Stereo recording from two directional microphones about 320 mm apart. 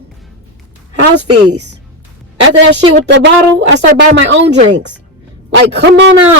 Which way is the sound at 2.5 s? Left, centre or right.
Right.